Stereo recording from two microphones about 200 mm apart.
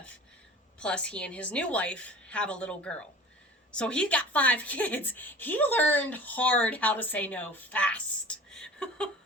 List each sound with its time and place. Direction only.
0.8 s a woman's voice: 5° left (ahead or behind)